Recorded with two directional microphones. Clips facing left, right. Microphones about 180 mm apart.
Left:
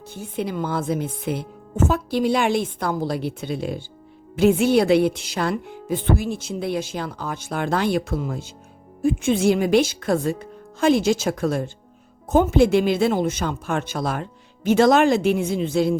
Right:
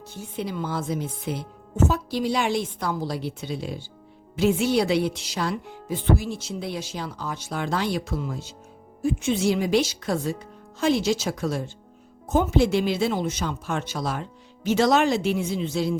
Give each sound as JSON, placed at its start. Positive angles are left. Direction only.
{"t": 0.1, "sound": "a woman's voice", "side_deg": 55}